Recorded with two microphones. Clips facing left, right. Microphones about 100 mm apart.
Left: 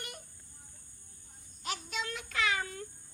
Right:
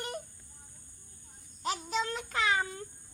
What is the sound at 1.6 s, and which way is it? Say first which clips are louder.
Child singing: right 6 dB; 30° right (ahead or behind).